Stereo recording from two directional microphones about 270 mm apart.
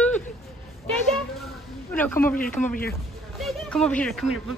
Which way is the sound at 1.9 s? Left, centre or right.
Centre.